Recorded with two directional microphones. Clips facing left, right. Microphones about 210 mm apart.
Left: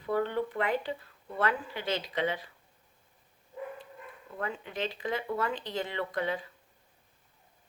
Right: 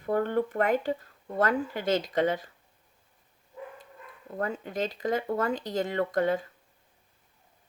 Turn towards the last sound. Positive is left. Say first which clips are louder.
# right 6 dB
turn(degrees=-45)  # may be behind; listen again after turning